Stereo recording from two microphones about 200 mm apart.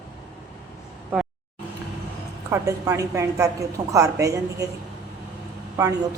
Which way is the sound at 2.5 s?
15° right (ahead or behind).